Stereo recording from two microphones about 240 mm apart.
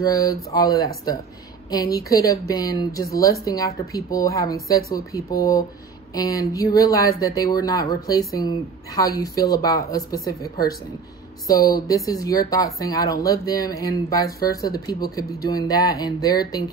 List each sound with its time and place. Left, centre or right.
0.0 s speech: centre